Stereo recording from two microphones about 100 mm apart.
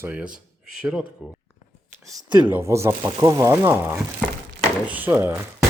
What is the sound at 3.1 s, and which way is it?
Speech, 40° right (ahead or behind).